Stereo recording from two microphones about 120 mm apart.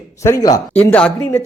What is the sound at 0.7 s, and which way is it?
Speech, 10° left (ahead or behind).